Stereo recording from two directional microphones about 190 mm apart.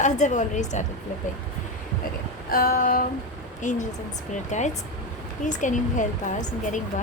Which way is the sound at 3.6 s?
40° left (ahead or behind).